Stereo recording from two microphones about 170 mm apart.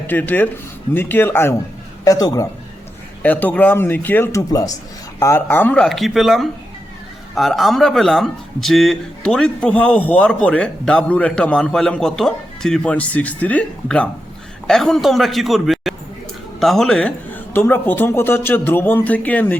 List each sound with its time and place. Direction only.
0.1 s a man's voice: 10° left (ahead or behind)
3.2 s a man's voice: 10° left (ahead or behind)